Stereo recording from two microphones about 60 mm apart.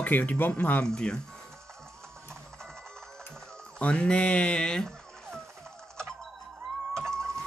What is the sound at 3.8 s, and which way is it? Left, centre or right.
Speech, centre.